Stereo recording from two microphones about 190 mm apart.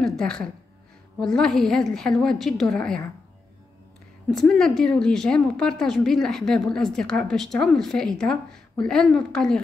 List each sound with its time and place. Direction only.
0.0 s speech: 5° left (ahead or behind)
4.3 s speech: centre (ahead or behind)